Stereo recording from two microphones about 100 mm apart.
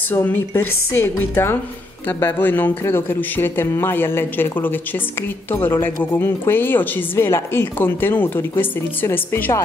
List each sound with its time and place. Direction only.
0.1 s speech: 20° left (ahead or behind)